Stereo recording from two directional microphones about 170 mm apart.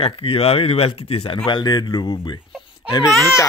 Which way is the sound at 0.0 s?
35° left (ahead or behind).